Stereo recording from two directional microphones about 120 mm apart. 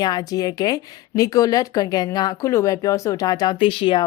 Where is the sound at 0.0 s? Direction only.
35° left (ahead or behind).